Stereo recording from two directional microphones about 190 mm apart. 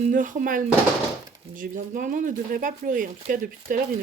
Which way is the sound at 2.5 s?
45° right (ahead or behind).